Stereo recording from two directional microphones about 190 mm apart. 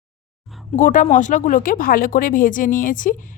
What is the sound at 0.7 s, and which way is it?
Speech, 45° left (ahead or behind).